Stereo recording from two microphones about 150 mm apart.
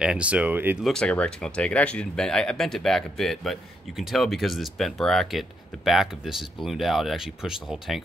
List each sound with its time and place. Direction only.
0.0 s speech: 5° right (ahead or behind)
0.8 s speech: 5° left (ahead or behind)